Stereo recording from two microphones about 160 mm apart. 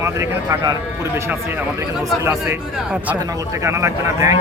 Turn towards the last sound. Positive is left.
turn(degrees=-20)  # may be behind; listen again after turning